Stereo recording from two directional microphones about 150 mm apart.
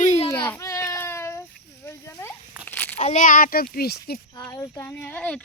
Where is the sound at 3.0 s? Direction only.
55° left (ahead or behind); by 4.2 s 90° left.